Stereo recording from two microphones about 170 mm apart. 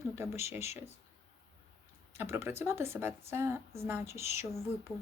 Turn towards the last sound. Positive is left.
turn(degrees=-15)  # may be behind; listen again after turning